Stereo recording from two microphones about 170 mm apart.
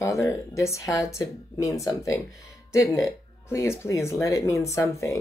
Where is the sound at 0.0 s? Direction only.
15° left (ahead or behind).